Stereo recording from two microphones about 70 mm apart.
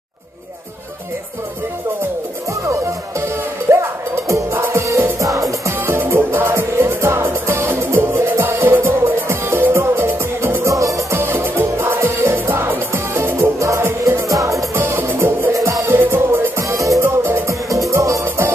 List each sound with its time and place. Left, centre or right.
3.7 s music: right
5.2 s music: right
5.7 s music: right
10.7 s music: right
11.1 s music: right
13.6 s music: right
13.8 s music: right
14.3 s music: right
14.8 s music: right
15.5 s music: right
16.6 s music: right
17.0 s music: right